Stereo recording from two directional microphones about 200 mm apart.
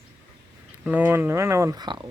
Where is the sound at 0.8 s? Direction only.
10° right (ahead or behind).